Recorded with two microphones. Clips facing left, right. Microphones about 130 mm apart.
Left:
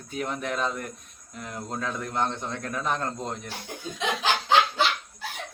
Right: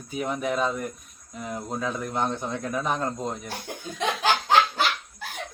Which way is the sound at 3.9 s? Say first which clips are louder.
Right 2 dB; 45° right (ahead or behind).